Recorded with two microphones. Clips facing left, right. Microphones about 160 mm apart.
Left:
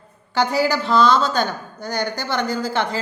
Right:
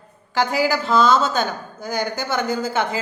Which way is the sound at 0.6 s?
Centre (ahead or behind).